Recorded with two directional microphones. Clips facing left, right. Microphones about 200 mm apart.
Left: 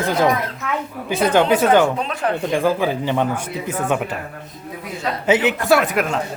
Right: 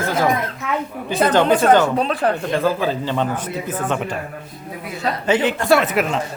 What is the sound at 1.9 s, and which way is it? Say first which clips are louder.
Speech: right 4 dB; 35° right (ahead or behind).